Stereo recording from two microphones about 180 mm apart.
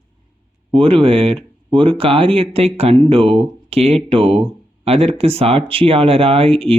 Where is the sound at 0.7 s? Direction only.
30° right (ahead or behind).